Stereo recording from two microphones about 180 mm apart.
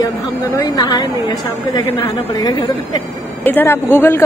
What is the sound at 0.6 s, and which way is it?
Speech, 20° left (ahead or behind).